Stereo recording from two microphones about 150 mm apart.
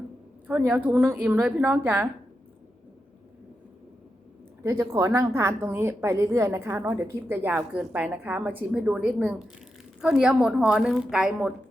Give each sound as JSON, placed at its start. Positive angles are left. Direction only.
{"t": 0.4, "sound": "a woman's voice", "side_deg": -10}
{"t": 4.6, "sound": "a woman's voice", "side_deg": -20}